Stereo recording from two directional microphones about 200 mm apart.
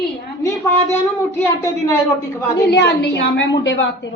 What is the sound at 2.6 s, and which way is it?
A woman's voice, 55° left (ahead or behind).